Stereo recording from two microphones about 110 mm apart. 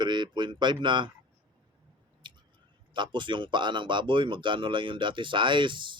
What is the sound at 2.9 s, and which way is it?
Speech, 45° right (ahead or behind).